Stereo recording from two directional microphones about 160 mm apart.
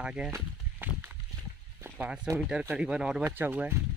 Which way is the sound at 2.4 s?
5° right (ahead or behind).